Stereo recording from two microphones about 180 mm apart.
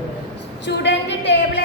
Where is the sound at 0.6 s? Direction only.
75° left (ahead or behind).